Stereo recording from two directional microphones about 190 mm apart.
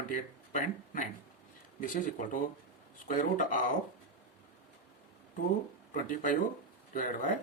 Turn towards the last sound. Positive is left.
turn(degrees=45)  # may be behind; listen again after turning